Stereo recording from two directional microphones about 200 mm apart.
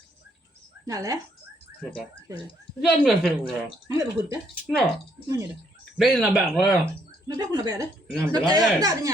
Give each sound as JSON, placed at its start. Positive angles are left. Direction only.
{"t": 0.9, "sound": "speech", "side_deg": -15}
{"t": 2.8, "sound": "speech", "side_deg": 0}
{"t": 3.8, "sound": "speech", "side_deg": -15}
{"t": 4.6, "sound": "speech", "side_deg": 0}
{"t": 6.0, "sound": "speech", "side_deg": 0}
{"t": 7.3, "sound": "speech", "side_deg": -20}